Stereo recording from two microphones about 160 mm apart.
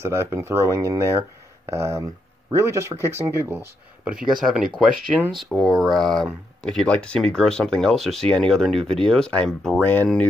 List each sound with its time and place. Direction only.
0.0 s speech: 15° right (ahead or behind); by 10.2 s 10° left (ahead or behind)